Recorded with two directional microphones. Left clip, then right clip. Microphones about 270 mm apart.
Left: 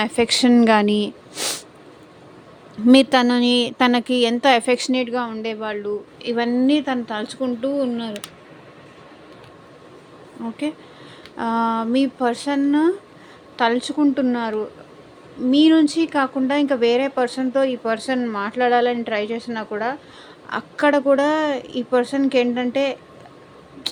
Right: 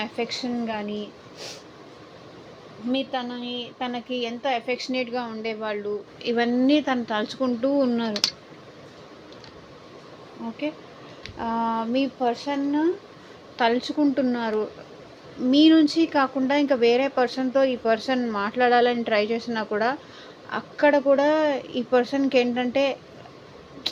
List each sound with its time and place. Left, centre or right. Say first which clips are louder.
0.0 s a woman's voice: left 11 dB; left
2.9 s a woman's voice: left 13 dB; left; by 8.2 s centre
11.3 s a woman's voice: left 5 dB; left; by 20.0 s centre
20.5 s a woman's voice: left 2 dB; centre